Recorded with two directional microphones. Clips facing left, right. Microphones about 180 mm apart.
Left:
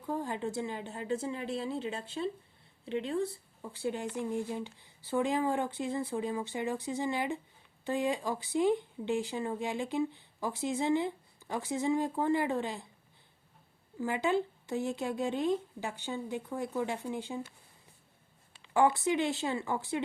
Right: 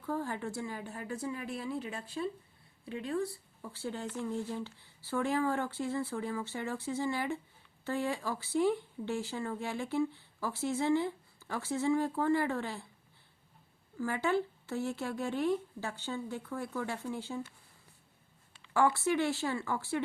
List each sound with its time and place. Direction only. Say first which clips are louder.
0.0 s a woman's voice: left 1 dB; 15° left (ahead or behind)
14.0 s speech: left 1 dB; 20° left (ahead or behind)
18.6 s a woman's voice: left 2 dB; 20° left (ahead or behind)